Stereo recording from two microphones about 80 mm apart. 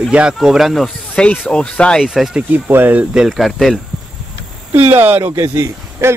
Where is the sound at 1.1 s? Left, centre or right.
Centre.